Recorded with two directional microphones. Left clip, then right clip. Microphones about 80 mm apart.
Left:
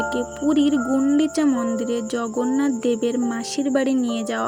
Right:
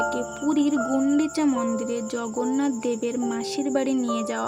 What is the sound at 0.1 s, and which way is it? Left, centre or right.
Speech, left.